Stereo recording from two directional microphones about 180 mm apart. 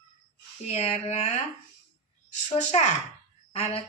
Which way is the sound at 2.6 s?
40° left (ahead or behind).